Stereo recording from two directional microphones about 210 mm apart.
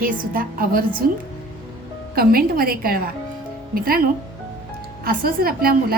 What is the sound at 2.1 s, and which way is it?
A woman's voice, 45° right (ahead or behind).